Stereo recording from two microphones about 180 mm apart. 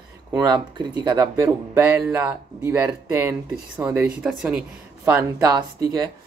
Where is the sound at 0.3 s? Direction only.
25° right (ahead or behind).